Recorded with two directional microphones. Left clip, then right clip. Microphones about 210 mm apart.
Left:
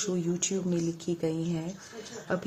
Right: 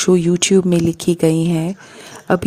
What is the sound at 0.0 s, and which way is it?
Speech, 50° right (ahead or behind).